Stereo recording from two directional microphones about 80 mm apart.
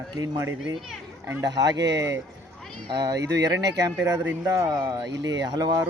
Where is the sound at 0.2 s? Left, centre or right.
Right.